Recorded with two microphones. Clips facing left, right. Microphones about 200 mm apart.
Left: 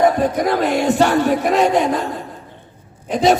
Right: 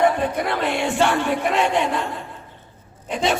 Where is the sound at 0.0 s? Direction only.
40° left (ahead or behind).